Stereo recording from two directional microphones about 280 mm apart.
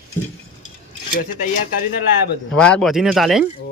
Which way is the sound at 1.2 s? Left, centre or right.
Left.